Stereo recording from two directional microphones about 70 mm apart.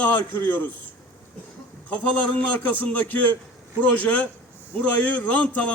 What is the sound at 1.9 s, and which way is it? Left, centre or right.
A man's voice, centre.